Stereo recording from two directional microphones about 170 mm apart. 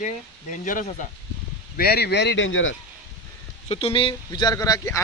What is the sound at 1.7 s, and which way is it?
Speech, 65° left (ahead or behind).